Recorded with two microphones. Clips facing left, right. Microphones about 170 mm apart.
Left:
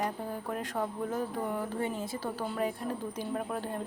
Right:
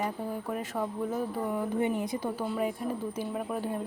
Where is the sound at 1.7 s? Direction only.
15° right (ahead or behind).